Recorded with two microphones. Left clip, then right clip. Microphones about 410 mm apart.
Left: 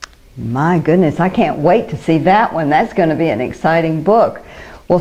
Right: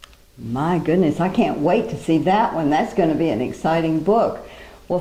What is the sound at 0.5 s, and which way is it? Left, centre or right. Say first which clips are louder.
Speech: left 6 dB; left.